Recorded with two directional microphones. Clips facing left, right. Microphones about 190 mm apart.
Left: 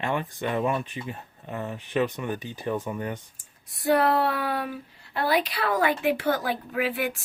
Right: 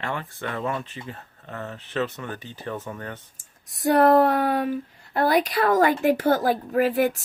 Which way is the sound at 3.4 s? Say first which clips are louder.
Right 7 dB; 45° right (ahead or behind).